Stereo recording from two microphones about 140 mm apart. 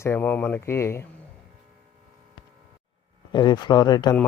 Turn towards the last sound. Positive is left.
turn(degrees=30)  # may be behind; listen again after turning